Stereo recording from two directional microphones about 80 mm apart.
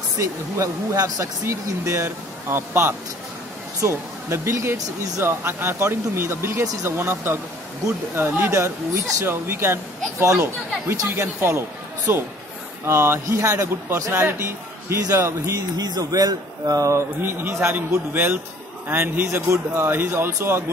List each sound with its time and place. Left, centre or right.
0.2 s a man's voice: right
8.5 s a man's voice: right
16.9 s a man's voice: right